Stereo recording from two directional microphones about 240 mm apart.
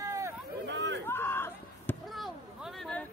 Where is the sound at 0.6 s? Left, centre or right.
Right.